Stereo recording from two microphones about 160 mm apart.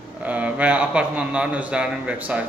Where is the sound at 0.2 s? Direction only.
10° right (ahead or behind).